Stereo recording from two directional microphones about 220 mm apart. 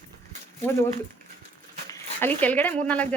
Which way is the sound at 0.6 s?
10° left (ahead or behind).